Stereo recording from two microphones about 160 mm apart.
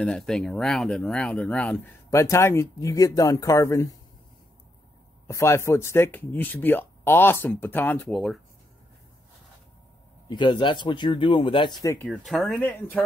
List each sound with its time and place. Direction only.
0.0 s speech: 5° left (ahead or behind)
2.0 s speech: 20° left (ahead or behind)
5.2 s speech: 15° left (ahead or behind)
10.3 s speech: 30° left (ahead or behind)
11.8 s speech: 15° left (ahead or behind)
12.3 s speech: centre (ahead or behind)